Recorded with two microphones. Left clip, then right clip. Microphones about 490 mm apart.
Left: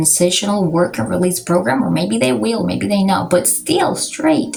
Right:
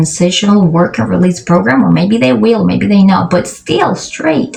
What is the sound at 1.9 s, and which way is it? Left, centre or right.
Speech, left.